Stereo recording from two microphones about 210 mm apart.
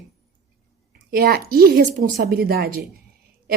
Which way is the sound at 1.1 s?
45° right (ahead or behind).